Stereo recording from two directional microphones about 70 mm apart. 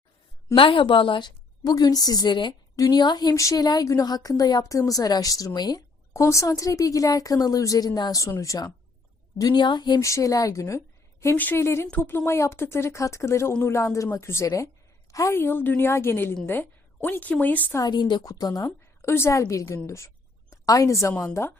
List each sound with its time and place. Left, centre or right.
1.2 s a woman's voice: left
3.3 s a woman's voice: left
5.5 s a woman's voice: left
6.1 s a woman's voice: left
8.2 s a woman's voice: left
9.4 s a woman's voice: left
10.0 s a woman's voice: left
14.4 s a woman's voice: left
15.3 s a woman's voice: left
17.8 s a woman's voice: left
18.6 s a woman's voice: left